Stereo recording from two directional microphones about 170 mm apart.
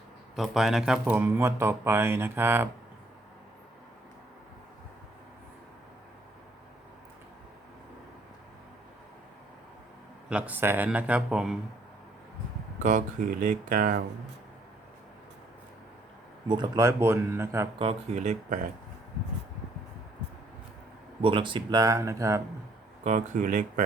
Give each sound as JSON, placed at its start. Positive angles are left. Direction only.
{"t": 0.3, "sound": "speech", "side_deg": 0}
{"t": 10.2, "sound": "speech", "side_deg": -5}
{"t": 12.8, "sound": "speech", "side_deg": -50}
{"t": 16.5, "sound": "speech", "side_deg": -20}
{"t": 17.7, "sound": "speech", "side_deg": -40}
{"t": 21.2, "sound": "speech", "side_deg": -30}
{"t": 23.0, "sound": "speech", "side_deg": -45}